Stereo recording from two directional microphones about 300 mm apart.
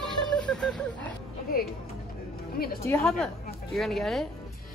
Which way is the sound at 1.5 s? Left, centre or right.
Left.